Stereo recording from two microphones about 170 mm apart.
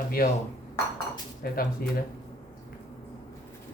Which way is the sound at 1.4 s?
60° left (ahead or behind).